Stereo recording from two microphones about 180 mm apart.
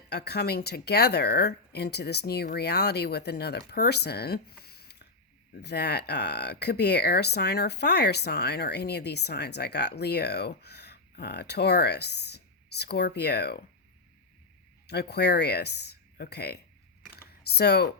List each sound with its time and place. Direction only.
0.1 s speech: 65° left (ahead or behind)
14.8 s speech: 65° left (ahead or behind)
17.1 s computer keyboard: 60° left (ahead or behind)